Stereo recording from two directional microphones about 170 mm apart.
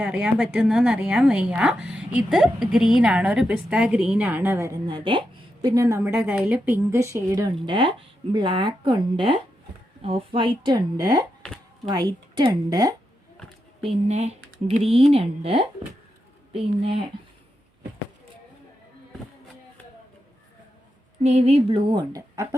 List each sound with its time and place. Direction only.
0.0 s a woman's voice: 5° right (ahead or behind)
7.5 s speech: 30° right (ahead or behind)
13.8 s speech: 40° right (ahead or behind)
21.2 s speech: 40° right (ahead or behind)